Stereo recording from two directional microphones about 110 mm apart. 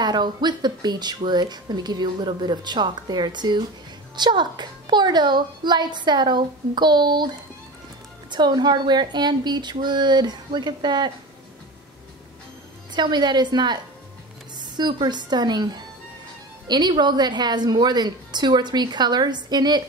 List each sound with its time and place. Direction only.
0.0 s a woman's voice: 40° right (ahead or behind)
8.3 s speech: 40° right (ahead or behind)
12.9 s speech: 40° right (ahead or behind)